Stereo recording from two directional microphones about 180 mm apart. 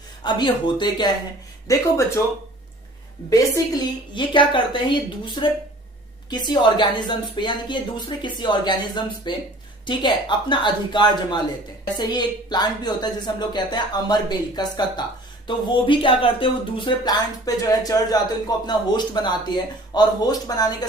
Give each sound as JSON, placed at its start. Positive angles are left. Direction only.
{"t": 0.2, "sound": "speech", "side_deg": 25}
{"t": 3.2, "sound": "speech", "side_deg": 15}